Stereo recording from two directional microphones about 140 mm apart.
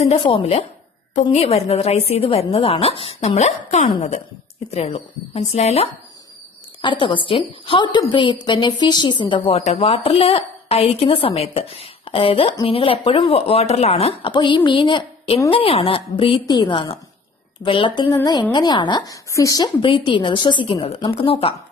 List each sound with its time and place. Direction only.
0.0 s a woman's voice: 40° left (ahead or behind)
6.8 s a woman's voice: 35° left (ahead or behind)
14.3 s a woman's voice: 35° left (ahead or behind)